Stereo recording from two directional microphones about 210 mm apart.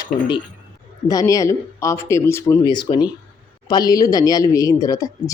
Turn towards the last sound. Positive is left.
turn(degrees=15)  # may be behind; listen again after turning